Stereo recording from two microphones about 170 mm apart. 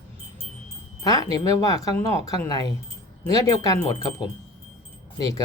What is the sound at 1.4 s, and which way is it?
Speech, 20° left (ahead or behind).